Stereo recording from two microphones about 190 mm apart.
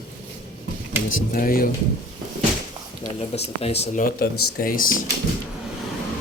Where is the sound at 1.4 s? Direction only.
50° left (ahead or behind).